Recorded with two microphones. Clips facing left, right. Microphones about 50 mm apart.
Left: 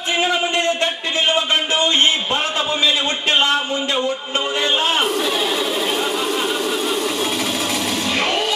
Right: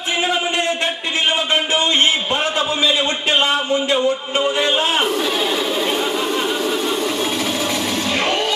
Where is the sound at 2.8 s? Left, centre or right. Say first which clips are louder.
Right 1 dB; centre.